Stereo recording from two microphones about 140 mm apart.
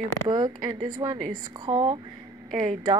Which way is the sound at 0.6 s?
30° right (ahead or behind).